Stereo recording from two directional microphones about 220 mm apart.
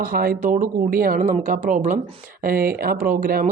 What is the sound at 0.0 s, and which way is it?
Speech, 40° right (ahead or behind).